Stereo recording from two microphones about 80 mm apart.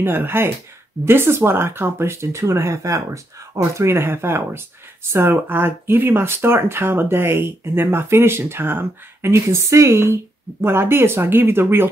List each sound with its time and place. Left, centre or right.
0.0 s speech: right